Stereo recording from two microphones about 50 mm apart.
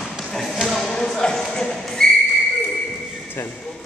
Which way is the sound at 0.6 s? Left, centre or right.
Centre.